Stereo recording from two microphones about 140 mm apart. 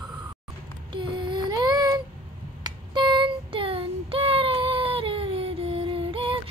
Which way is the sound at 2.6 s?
35° right (ahead or behind).